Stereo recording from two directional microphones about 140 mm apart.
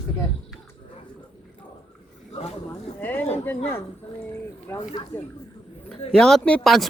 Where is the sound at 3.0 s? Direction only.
15° left (ahead or behind).